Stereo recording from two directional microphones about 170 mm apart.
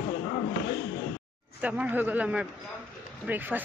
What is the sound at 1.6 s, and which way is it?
Speech, 10° right (ahead or behind).